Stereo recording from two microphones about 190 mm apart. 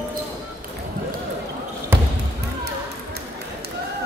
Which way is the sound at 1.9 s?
10° right (ahead or behind).